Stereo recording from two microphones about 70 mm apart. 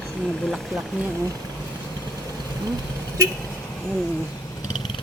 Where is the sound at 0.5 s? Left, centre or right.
Centre.